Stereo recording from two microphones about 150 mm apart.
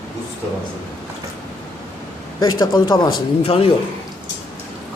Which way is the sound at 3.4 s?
40° left (ahead or behind).